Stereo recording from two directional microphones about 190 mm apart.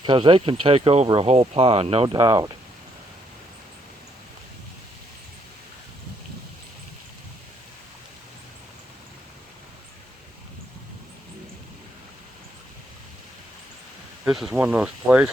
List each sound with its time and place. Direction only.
0.0 s speech: 25° right (ahead or behind)
2.1 s speech: 20° right (ahead or behind)
14.3 s speech: 5° right (ahead or behind)